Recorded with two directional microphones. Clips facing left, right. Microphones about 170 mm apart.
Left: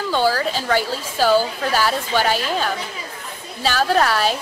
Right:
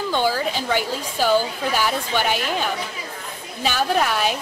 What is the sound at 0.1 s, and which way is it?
A woman's voice, 15° right (ahead or behind).